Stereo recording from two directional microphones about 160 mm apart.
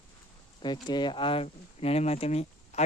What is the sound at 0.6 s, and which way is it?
Speech, 30° left (ahead or behind).